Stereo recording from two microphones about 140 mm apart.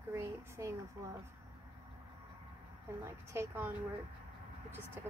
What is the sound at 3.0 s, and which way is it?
Speech, 20° right (ahead or behind).